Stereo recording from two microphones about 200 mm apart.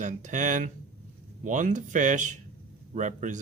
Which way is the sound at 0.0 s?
40° right (ahead or behind).